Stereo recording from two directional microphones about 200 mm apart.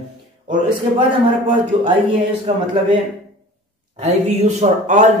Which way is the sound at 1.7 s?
30° right (ahead or behind).